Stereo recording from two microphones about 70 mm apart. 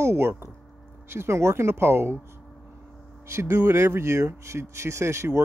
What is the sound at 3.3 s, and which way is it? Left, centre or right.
Speech, right.